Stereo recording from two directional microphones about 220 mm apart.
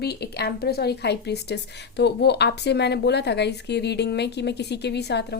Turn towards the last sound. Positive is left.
turn(degrees=50)  # may be behind; listen again after turning